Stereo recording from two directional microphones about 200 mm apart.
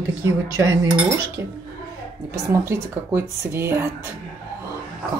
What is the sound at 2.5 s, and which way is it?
Speech, 15° right (ahead or behind).